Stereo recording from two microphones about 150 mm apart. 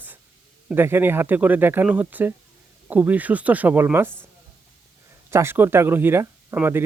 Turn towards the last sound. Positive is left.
turn(degrees=-15)  # may be behind; listen again after turning